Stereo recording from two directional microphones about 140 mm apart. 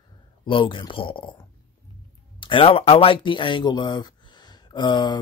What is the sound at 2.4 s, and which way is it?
Speech, 40° left (ahead or behind).